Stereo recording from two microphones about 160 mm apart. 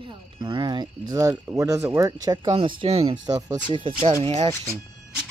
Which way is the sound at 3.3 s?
25° right (ahead or behind).